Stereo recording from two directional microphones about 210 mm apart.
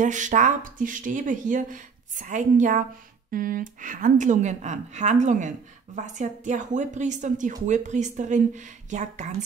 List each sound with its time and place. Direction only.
0.0 s speech: 35° right (ahead or behind)